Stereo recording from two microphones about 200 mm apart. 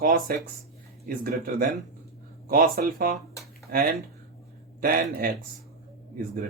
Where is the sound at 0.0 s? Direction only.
45° right (ahead or behind).